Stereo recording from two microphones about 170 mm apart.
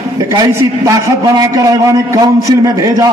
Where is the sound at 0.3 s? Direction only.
20° right (ahead or behind).